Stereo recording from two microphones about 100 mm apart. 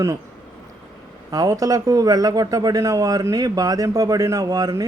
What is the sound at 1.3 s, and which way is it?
A man's voice, 35° right (ahead or behind).